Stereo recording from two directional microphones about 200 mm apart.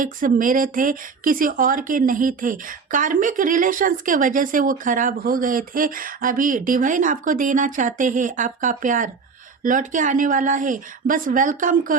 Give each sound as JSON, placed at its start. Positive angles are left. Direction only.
{"t": 0.0, "sound": "speech", "side_deg": -40}